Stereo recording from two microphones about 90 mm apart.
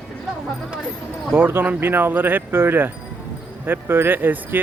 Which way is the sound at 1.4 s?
25° right (ahead or behind).